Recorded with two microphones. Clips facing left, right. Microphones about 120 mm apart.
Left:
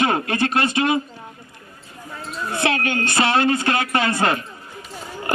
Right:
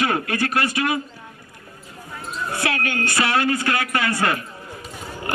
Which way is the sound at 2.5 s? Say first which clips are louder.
Left 4 dB; 25° left (ahead or behind).